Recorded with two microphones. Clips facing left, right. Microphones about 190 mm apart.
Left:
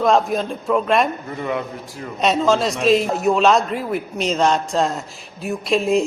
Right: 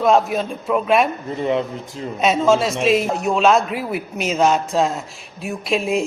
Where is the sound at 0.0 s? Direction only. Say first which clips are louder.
Right 1 dB; centre (ahead or behind).